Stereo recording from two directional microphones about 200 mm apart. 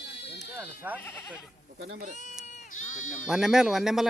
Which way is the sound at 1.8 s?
50° right (ahead or behind).